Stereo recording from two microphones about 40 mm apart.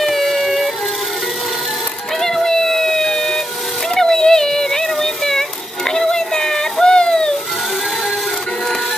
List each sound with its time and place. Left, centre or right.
0.0 s music: centre
2.1 s music: centre
3.9 s a sound: centre